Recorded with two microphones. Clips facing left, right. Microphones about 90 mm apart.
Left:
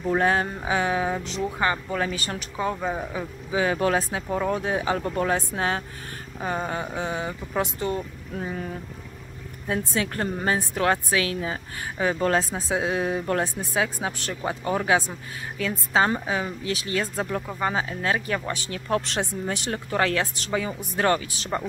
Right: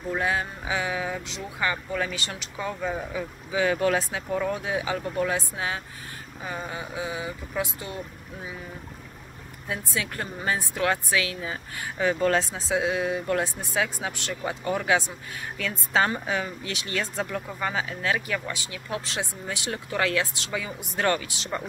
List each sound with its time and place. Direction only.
0.2 s speech: 40° left (ahead or behind)
6.4 s speech: 45° left (ahead or behind)
9.7 s speech: 35° left (ahead or behind)